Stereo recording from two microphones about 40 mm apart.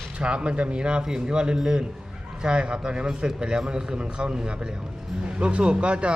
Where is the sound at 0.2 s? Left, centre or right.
Right.